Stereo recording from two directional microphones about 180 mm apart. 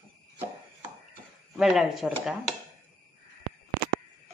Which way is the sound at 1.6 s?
Centre (ahead or behind).